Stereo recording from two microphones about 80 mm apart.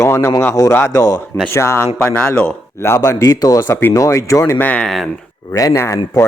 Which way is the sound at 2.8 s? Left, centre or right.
Left.